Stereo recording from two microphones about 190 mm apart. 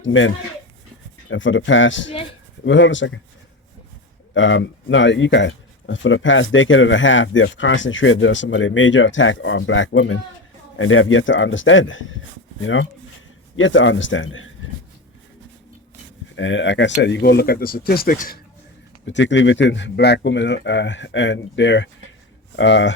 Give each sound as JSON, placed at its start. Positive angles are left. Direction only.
{"t": 0.0, "sound": "speech", "side_deg": 90}
{"t": 4.4, "sound": "speech", "side_deg": 85}
{"t": 10.8, "sound": "speech", "side_deg": 90}
{"t": 16.3, "sound": "speech", "side_deg": 75}
{"t": 19.0, "sound": "speech", "side_deg": 75}